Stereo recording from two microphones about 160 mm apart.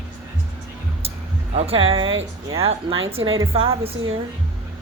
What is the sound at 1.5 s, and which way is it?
Speech, 40° right (ahead or behind).